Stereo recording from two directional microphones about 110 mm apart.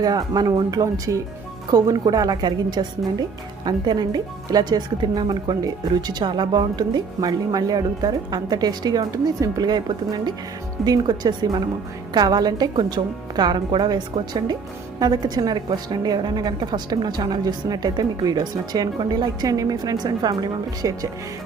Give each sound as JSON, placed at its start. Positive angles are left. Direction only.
{"t": 0.0, "sound": "speech", "side_deg": -35}